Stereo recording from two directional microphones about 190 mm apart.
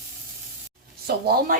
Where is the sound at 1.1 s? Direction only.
55° right (ahead or behind).